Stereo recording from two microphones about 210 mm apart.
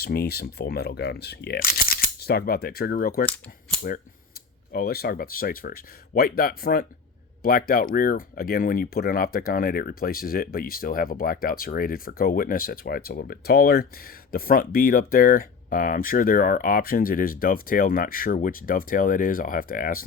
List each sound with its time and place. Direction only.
0.0 s speech: 45° left (ahead or behind)
3.2 s cap gun: 5° left (ahead or behind)
4.7 s speech: 45° left (ahead or behind)